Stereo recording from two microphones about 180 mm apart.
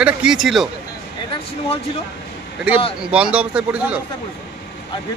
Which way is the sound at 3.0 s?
5° right (ahead or behind).